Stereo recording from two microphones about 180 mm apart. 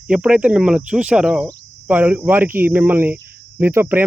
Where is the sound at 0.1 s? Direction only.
5° right (ahead or behind).